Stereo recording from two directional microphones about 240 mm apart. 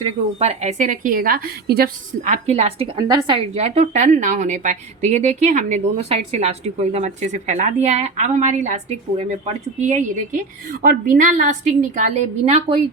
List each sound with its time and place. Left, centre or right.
0.3 s a woman's voice: right